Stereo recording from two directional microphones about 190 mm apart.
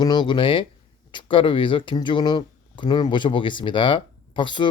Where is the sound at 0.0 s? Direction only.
20° left (ahead or behind).